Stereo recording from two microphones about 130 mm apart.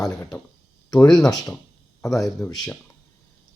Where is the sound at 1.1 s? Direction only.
30° left (ahead or behind).